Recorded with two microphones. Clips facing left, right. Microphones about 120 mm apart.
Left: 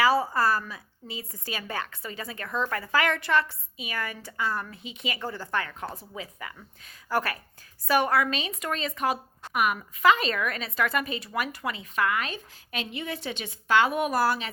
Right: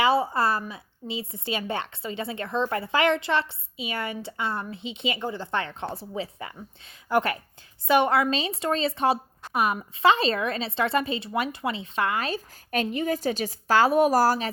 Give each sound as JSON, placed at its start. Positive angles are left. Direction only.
{"t": 0.0, "sound": "a woman's voice", "side_deg": -25}